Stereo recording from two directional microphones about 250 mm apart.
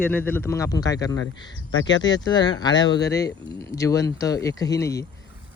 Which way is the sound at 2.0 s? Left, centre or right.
Centre.